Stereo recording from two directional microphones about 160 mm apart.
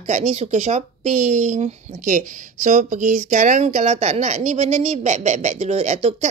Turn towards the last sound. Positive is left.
turn(degrees=-45)  # may be behind; listen again after turning